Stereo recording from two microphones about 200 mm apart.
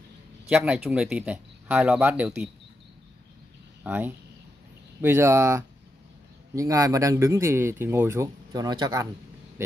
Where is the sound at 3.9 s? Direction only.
10° right (ahead or behind).